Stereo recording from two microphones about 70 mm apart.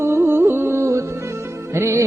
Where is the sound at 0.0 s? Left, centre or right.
Right.